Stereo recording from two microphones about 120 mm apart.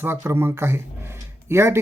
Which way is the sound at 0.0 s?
20° right (ahead or behind).